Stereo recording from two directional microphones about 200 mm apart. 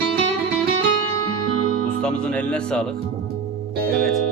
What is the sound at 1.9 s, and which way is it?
Speech, 5° left (ahead or behind).